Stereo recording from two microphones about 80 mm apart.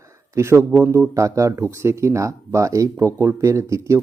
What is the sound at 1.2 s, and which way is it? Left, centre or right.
Speech, right.